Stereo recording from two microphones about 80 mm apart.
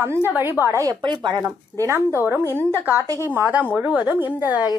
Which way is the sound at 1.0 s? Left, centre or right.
Right.